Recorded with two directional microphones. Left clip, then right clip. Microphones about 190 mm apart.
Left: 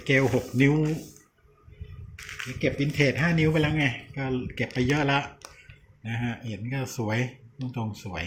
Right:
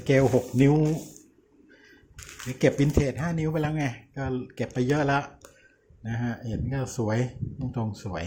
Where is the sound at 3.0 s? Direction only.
15° right (ahead or behind).